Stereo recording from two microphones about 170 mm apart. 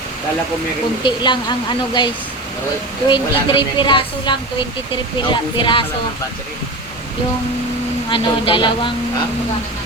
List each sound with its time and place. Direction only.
1.0 s speech: 25° left (ahead or behind)
3.1 s speech: 30° left (ahead or behind)
8.1 s speech: 30° left (ahead or behind)